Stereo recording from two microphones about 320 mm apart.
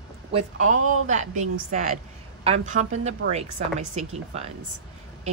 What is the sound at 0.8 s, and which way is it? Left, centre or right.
Speech, right.